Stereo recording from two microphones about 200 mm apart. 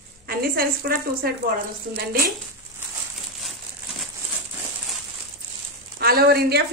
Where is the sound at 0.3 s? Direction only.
50° right (ahead or behind).